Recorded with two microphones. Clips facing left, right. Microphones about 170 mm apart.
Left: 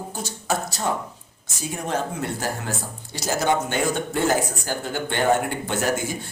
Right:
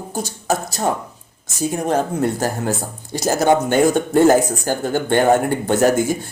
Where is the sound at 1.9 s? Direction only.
45° right (ahead or behind).